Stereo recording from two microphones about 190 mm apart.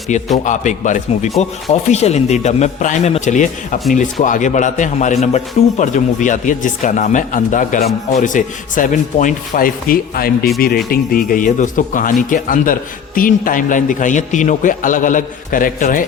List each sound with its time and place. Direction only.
0.1 s a man's voice: 40° left (ahead or behind)